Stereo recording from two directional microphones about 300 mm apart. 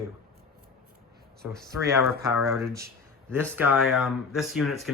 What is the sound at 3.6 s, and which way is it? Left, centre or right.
Speech, centre.